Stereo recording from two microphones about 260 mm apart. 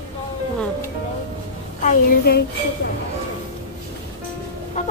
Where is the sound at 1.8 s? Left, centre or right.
Left.